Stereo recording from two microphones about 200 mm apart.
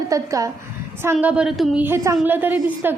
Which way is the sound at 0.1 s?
15° right (ahead or behind).